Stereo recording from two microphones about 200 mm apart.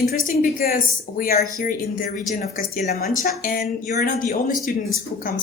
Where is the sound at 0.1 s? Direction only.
50° left (ahead or behind).